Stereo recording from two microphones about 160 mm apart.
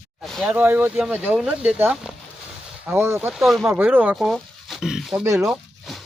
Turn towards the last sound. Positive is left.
turn(degrees=0)  # may be behind; listen again after turning